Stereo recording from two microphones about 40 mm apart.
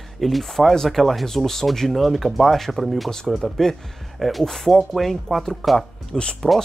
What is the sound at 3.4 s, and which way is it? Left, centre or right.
Speech, centre.